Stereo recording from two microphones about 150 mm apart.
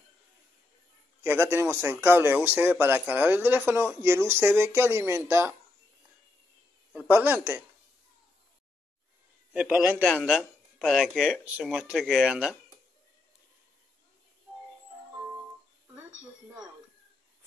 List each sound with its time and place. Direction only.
1.2 s speech: 15° right (ahead or behind)
6.9 s a man's voice: 10° right (ahead or behind)
9.5 s speech: 5° right (ahead or behind)